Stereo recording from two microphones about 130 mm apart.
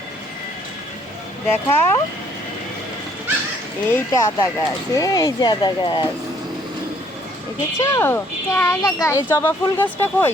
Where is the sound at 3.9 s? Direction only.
20° left (ahead or behind); by 6.0 s 35° left (ahead or behind).